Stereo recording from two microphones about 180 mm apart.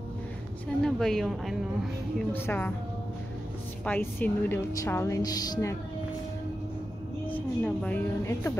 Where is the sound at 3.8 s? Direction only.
10° left (ahead or behind).